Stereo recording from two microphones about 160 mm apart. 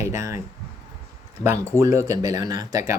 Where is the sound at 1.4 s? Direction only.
45° left (ahead or behind).